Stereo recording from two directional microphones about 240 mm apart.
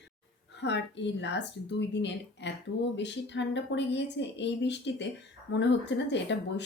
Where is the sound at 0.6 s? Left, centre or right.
Left.